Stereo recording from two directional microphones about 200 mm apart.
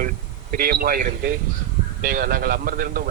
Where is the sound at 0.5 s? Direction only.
45° right (ahead or behind).